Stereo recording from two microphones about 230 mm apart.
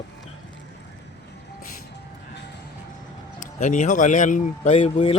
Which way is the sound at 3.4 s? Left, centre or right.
Left.